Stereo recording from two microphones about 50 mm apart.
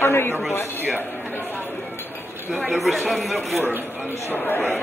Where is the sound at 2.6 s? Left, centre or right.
Centre.